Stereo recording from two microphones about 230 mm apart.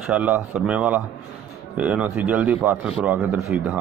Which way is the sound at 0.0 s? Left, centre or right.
Centre.